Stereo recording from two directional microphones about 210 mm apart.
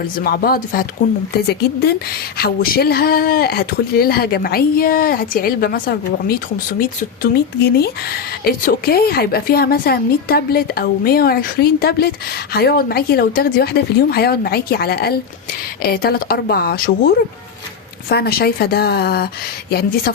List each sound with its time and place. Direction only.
0.2 s speech: 45° left (ahead or behind)
18.1 s speech: 50° left (ahead or behind)